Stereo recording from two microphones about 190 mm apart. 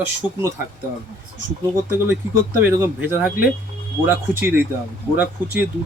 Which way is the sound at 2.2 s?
15° right (ahead or behind).